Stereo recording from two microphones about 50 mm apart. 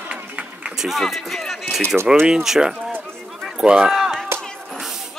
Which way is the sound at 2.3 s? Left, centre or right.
Centre.